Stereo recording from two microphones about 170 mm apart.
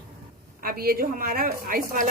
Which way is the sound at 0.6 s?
60° right (ahead or behind).